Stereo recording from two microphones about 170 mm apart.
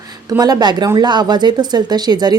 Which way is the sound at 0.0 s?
25° right (ahead or behind).